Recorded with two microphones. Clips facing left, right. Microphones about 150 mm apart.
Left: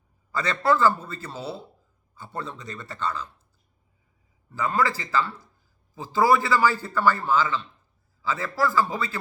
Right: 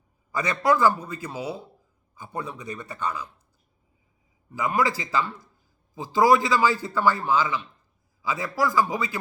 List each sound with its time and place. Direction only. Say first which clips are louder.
0.3 s a man's voice: even; 15° right (ahead or behind)
4.5 s a man's voice: even; 15° right (ahead or behind)